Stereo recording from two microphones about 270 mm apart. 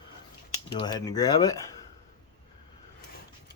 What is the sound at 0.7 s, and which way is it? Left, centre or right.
Speech, centre.